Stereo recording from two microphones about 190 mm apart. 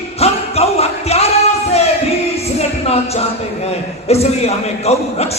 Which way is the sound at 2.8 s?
35° left (ahead or behind).